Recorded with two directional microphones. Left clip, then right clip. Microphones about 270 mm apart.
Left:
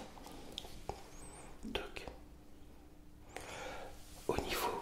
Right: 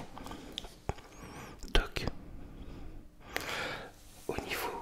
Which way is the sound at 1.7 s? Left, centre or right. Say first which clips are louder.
Right 10 dB; right.